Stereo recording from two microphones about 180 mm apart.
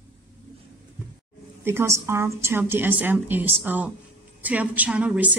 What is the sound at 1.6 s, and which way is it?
A woman's voice, 15° right (ahead or behind).